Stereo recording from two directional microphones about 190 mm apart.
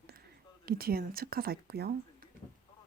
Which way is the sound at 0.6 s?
50° right (ahead or behind).